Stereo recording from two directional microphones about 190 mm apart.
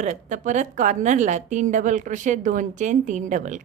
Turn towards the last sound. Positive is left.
turn(degrees=-40)  # may be behind; listen again after turning